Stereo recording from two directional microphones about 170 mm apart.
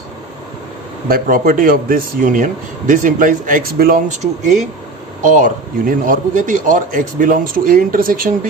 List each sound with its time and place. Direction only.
1.0 s speech: 55° right (ahead or behind)
4.2 s speech: 45° right (ahead or behind)